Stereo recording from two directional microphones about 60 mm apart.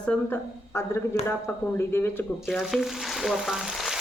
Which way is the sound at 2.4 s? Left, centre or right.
Centre.